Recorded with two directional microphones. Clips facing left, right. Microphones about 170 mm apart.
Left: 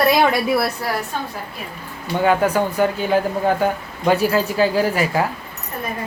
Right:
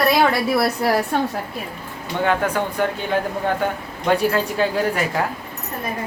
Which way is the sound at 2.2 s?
10° left (ahead or behind).